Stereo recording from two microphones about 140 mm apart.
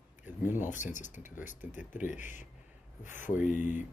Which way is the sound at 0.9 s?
65° left (ahead or behind).